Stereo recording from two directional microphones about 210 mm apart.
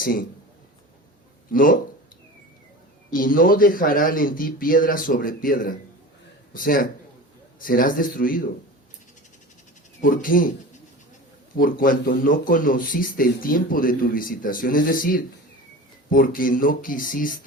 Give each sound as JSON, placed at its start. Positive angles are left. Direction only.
{"t": 0.0, "sound": "a man's voice", "side_deg": 40}
{"t": 1.5, "sound": "speech", "side_deg": 40}
{"t": 3.1, "sound": "speech", "side_deg": 40}
{"t": 10.0, "sound": "speech", "side_deg": 40}
{"t": 11.5, "sound": "speech", "side_deg": 40}